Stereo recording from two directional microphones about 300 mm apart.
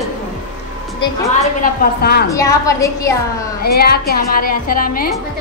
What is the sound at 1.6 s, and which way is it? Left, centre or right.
Speech, left.